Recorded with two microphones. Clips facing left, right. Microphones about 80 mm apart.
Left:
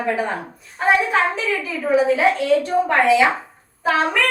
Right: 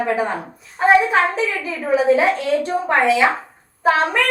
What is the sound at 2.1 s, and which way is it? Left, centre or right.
Speech, right.